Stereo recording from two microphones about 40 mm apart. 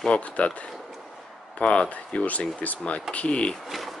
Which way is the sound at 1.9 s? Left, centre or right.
Left.